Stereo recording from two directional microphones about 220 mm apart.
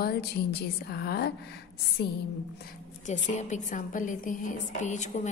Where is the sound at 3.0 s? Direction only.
35° left (ahead or behind).